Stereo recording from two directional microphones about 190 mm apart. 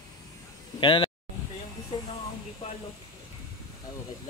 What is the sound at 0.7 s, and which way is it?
Speech, 25° left (ahead or behind).